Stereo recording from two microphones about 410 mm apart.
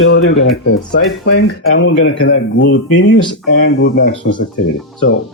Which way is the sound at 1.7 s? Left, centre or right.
Left.